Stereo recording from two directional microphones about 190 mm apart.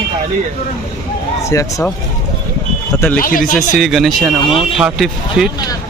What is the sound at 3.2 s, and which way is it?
Speech, 45° left (ahead or behind).